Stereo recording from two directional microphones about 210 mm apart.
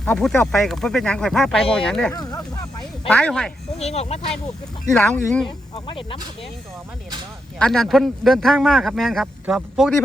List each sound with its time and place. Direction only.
0.0 s speech: 5° left (ahead or behind)
2.1 s speech: 20° left (ahead or behind)
3.1 s speech: 5° left (ahead or behind)
3.8 s speech: 30° left (ahead or behind)
4.9 s speech: 5° left (ahead or behind)
7.6 s speech: centre (ahead or behind)